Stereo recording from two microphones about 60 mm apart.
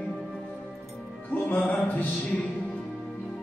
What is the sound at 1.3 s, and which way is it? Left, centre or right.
Music, left.